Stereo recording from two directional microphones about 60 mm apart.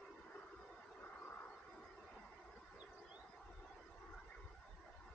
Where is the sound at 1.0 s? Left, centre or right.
Left.